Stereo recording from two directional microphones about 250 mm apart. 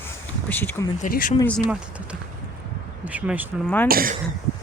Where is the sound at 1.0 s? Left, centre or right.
Left.